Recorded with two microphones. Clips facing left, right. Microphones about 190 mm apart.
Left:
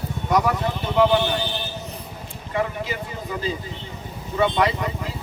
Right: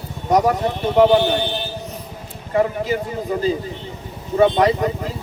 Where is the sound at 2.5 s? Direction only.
40° right (ahead or behind).